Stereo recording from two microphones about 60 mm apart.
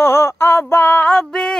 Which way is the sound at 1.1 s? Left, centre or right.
Centre.